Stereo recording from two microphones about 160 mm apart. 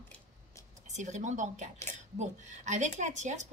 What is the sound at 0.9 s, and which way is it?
Speech, 45° right (ahead or behind).